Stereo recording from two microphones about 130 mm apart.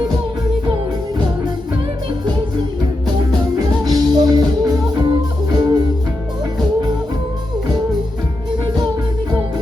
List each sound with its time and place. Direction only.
3.9 s music: 30° right (ahead or behind)
8.6 s music: 30° right (ahead or behind)